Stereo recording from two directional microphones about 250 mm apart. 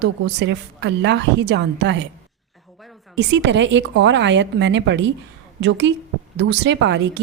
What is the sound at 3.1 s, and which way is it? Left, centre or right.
A woman's voice, right.